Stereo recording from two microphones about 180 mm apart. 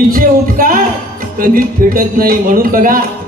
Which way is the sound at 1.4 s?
50° right (ahead or behind).